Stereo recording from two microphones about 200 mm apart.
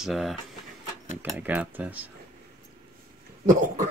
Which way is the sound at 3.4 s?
40° right (ahead or behind).